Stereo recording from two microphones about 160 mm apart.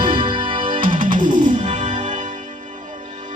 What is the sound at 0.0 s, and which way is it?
Music, 30° right (ahead or behind).